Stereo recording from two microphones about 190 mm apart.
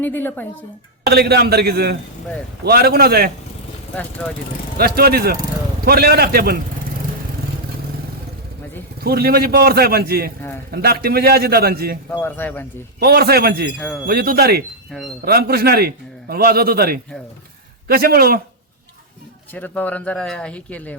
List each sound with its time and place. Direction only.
0.0 s speech: 10° left (ahead or behind)
1.0 s a man's voice: 60° right (ahead or behind)
4.8 s a man's voice: 55° right (ahead or behind)
9.0 s a man's voice: 55° right (ahead or behind)
12.2 s speech: 10° left (ahead or behind)
13.0 s a man's voice: 55° right (ahead or behind)
19.5 s speech: 10° left (ahead or behind)